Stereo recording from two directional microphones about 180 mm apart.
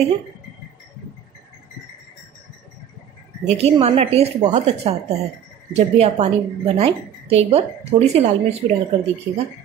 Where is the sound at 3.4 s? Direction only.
35° right (ahead or behind).